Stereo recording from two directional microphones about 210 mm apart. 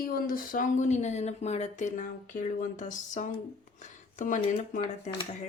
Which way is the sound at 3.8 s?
35° left (ahead or behind).